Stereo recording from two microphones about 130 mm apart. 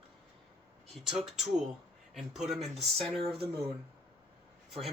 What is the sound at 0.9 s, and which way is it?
Speech, centre (ahead or behind).